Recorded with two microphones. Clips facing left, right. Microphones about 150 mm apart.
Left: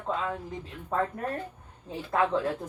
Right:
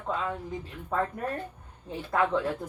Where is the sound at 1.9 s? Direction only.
5° left (ahead or behind).